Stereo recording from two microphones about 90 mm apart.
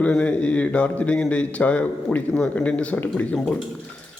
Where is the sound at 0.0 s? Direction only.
15° left (ahead or behind).